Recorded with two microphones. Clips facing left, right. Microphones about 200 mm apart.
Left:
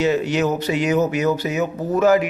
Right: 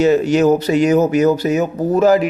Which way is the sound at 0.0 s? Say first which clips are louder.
Right 6 dB; 40° right (ahead or behind).